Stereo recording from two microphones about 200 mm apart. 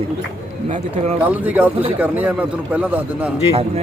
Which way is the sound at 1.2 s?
10° right (ahead or behind).